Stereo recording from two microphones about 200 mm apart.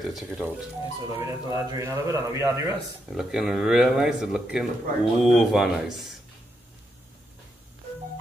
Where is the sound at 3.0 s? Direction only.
Centre (ahead or behind).